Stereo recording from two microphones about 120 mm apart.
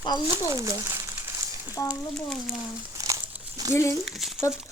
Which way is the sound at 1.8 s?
25° left (ahead or behind).